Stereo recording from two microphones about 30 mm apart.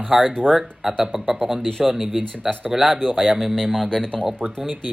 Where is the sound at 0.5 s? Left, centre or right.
Right.